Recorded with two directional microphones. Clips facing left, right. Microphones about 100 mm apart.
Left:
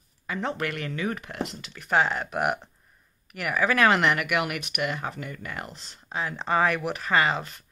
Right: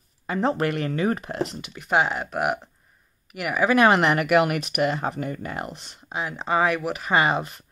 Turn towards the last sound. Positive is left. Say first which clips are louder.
# right 3 dB
turn(degrees=-25)  # may be behind; listen again after turning